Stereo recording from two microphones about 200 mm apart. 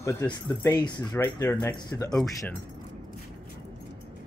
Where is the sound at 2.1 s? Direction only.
5° left (ahead or behind).